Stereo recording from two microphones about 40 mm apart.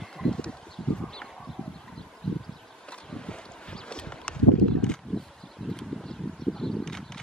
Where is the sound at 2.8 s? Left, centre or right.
Left.